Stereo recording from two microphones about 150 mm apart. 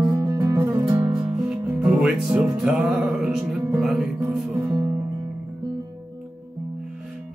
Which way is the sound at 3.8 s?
5° right (ahead or behind).